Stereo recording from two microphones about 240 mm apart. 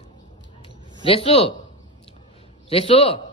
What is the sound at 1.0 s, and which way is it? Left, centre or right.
Speech, left.